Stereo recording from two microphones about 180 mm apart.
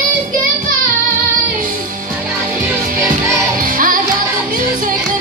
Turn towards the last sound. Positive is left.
turn(degrees=-50)  # may be behind; listen again after turning